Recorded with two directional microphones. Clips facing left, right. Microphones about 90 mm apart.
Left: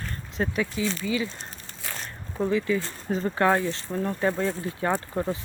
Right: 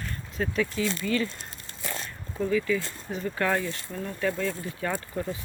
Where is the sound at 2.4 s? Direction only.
30° left (ahead or behind).